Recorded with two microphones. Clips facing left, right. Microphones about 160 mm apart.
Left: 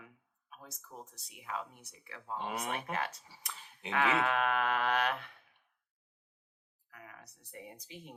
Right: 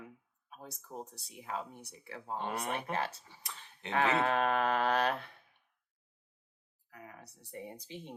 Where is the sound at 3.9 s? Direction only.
30° right (ahead or behind).